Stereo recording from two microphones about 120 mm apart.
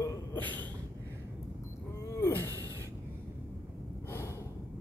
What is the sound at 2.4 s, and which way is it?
Gasp, 25° right (ahead or behind).